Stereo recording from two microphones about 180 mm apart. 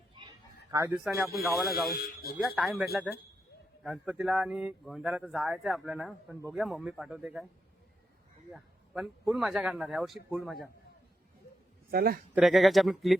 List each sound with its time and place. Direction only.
0.2 s a sound: 25° right (ahead or behind)
0.7 s speech: 10° right (ahead or behind)
1.9 s speech: 55° left (ahead or behind)
2.4 s speech: centre (ahead or behind)
8.5 s speech: centre (ahead or behind)
11.9 s a man's voice: 55° right (ahead or behind)
12.3 s speech: centre (ahead or behind)